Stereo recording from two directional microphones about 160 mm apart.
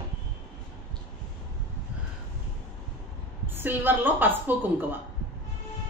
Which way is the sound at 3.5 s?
10° right (ahead or behind).